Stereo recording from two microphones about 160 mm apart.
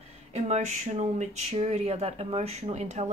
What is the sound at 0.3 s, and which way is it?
Speech, 45° right (ahead or behind).